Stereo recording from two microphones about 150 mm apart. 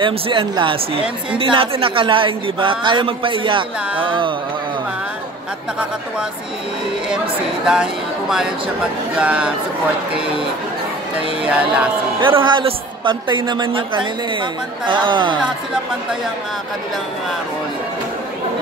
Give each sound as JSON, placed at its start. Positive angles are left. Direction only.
{"t": 0.0, "sound": "a man's voice", "side_deg": -35}
{"t": 7.6, "sound": "speech", "side_deg": -5}
{"t": 11.4, "sound": "speech", "side_deg": -10}
{"t": 12.2, "sound": "a man's voice", "side_deg": -35}